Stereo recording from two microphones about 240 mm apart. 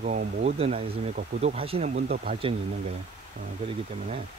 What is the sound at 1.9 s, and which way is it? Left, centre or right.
Speech, right.